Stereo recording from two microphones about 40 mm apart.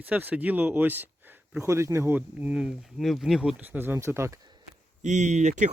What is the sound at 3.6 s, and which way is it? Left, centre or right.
Speech, right.